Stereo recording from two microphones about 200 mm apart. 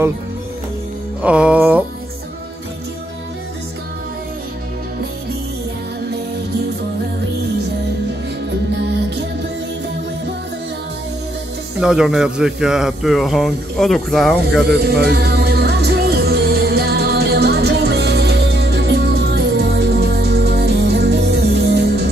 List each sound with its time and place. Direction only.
1.2 s music: 5° right (ahead or behind)
11.8 s a man's voice: 5° right (ahead or behind)
14.8 s music: 55° right (ahead or behind)